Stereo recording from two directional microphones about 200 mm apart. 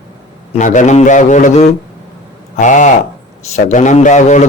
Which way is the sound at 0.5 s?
40° left (ahead or behind).